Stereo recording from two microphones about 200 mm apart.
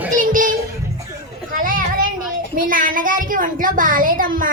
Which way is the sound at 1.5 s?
45° right (ahead or behind).